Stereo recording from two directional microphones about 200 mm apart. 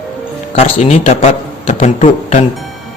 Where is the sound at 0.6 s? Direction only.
30° left (ahead or behind).